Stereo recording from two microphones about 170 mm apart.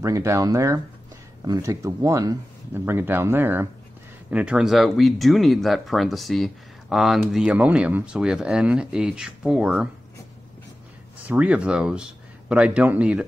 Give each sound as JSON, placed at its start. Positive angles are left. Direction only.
{"t": 0.0, "sound": "speech", "side_deg": -15}
{"t": 11.2, "sound": "speech", "side_deg": -10}